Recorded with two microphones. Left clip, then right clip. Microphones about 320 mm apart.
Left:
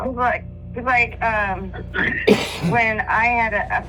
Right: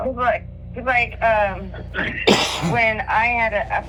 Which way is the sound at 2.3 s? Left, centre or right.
Right.